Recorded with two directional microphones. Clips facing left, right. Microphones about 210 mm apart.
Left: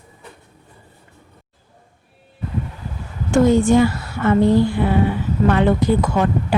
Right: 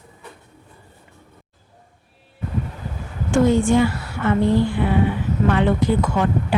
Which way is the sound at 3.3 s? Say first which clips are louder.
Left 3 dB; 40° left (ahead or behind).